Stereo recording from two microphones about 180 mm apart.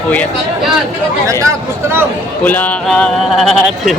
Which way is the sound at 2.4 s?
10° left (ahead or behind).